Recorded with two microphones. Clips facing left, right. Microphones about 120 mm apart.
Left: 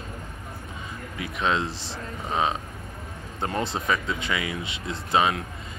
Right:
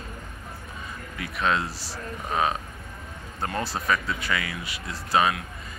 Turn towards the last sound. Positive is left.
turn(degrees=25)  # may be behind; listen again after turning